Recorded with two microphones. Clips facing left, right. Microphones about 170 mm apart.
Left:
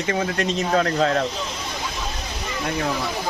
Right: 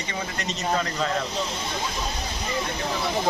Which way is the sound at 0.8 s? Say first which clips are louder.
Left 10 dB; 55° left (ahead or behind).